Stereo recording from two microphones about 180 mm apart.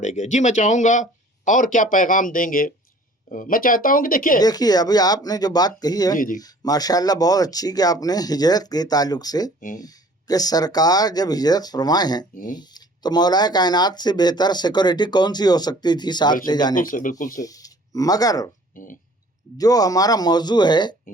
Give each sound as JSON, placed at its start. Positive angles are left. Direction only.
{"t": 0.0, "sound": "speech", "side_deg": 40}
{"t": 4.4, "sound": "speech", "side_deg": 20}
{"t": 6.1, "sound": "speech", "side_deg": 50}
{"t": 6.4, "sound": "speech", "side_deg": 20}
{"t": 16.7, "sound": "speech", "side_deg": 50}
{"t": 17.4, "sound": "speech", "side_deg": 20}
{"t": 18.7, "sound": "speech", "side_deg": 50}
{"t": 19.5, "sound": "speech", "side_deg": 20}